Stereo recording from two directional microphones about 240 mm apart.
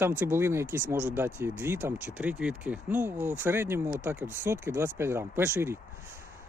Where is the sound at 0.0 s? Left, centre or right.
Centre.